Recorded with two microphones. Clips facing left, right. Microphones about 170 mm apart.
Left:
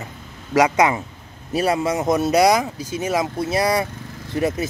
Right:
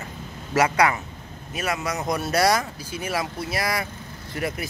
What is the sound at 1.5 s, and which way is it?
Speech, 30° left (ahead or behind).